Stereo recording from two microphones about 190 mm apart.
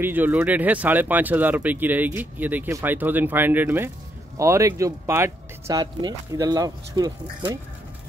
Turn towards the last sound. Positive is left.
turn(degrees=-20)  # may be behind; listen again after turning